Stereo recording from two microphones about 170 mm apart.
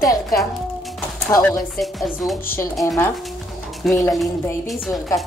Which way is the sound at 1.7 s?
Centre (ahead or behind).